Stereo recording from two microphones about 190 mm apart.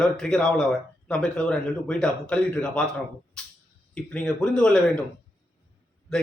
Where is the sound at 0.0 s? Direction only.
5° left (ahead or behind).